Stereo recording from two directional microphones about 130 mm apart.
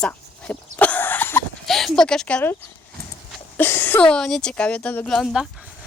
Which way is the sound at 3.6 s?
15° left (ahead or behind).